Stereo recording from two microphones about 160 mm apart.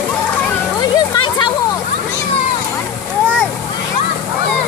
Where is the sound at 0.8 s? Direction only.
30° left (ahead or behind).